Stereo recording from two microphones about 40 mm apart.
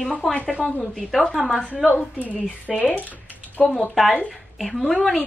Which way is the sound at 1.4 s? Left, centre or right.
Right.